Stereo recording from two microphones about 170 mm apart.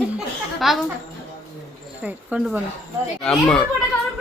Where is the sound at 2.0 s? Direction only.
10° right (ahead or behind).